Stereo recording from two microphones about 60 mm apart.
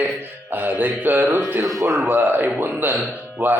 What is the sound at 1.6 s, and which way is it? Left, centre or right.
Speech, right.